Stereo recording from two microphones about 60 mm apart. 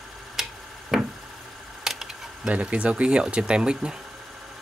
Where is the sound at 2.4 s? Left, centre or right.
Right.